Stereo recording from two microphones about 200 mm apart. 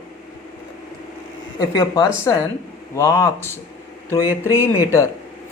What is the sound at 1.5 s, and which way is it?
Speech, 15° left (ahead or behind).